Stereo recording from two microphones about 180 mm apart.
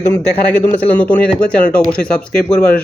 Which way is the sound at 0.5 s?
10° left (ahead or behind).